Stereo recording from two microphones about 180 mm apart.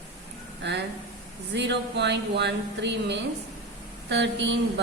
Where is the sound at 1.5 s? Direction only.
75° right (ahead or behind).